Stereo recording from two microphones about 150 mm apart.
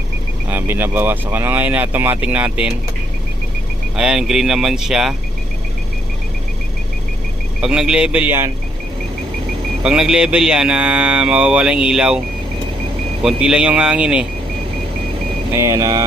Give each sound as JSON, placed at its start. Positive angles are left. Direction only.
{"t": 0.5, "sound": "speech", "side_deg": -15}
{"t": 3.9, "sound": "speech", "side_deg": -5}
{"t": 7.6, "sound": "speech", "side_deg": -5}
{"t": 9.8, "sound": "speech", "side_deg": -5}
{"t": 13.2, "sound": "speech", "side_deg": -5}
{"t": 15.5, "sound": "speech", "side_deg": -20}